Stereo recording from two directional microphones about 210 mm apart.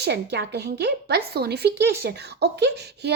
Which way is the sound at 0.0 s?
50° right (ahead or behind).